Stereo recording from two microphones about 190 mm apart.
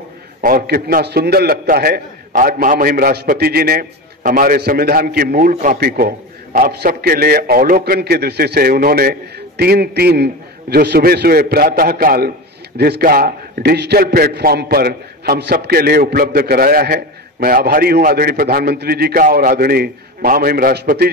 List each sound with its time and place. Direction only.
0.4 s a man's voice: 50° right (ahead or behind)